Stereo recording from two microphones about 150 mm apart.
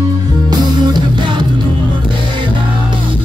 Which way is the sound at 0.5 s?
30° right (ahead or behind).